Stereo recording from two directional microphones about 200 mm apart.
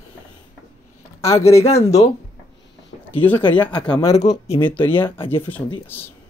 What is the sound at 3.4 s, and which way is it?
Speech, 25° left (ahead or behind).